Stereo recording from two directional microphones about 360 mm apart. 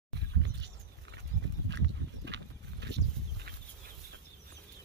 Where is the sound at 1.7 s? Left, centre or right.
Right.